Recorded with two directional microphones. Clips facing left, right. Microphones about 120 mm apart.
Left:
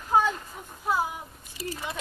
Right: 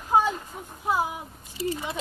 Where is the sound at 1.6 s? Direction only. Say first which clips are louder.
Right 6 dB; 25° right (ahead or behind).